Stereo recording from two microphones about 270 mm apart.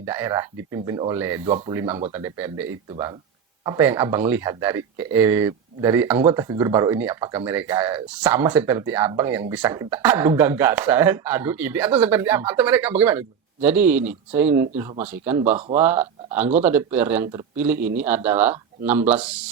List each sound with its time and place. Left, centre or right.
0.0 s speech: centre
1.5 s speech: right
1.7 s speech: centre